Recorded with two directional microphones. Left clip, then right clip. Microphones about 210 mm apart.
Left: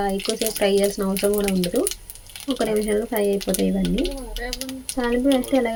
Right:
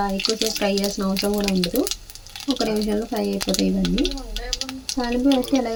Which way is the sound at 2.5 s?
15° left (ahead or behind).